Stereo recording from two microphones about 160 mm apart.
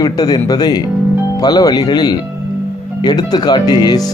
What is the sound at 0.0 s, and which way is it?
Speech, 25° left (ahead or behind).